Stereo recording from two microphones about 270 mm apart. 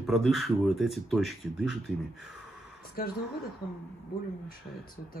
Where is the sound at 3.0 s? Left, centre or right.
Left.